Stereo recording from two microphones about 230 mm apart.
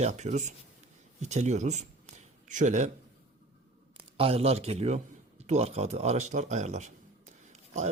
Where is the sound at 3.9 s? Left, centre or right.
Right.